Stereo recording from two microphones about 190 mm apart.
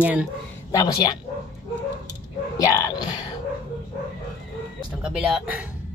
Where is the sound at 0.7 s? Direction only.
20° left (ahead or behind).